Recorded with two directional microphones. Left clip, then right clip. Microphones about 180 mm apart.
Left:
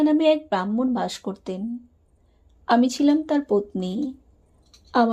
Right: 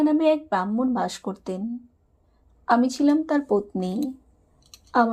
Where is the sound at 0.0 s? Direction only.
10° left (ahead or behind).